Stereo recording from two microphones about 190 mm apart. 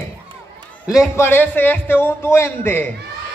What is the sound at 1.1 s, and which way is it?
A man's voice, 10° left (ahead or behind).